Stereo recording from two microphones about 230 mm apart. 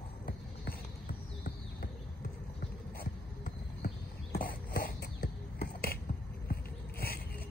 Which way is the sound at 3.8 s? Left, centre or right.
Left.